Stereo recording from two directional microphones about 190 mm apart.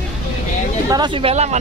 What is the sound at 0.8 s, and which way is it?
Speech, 20° right (ahead or behind).